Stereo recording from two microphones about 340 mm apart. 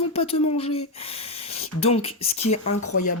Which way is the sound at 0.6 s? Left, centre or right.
Centre.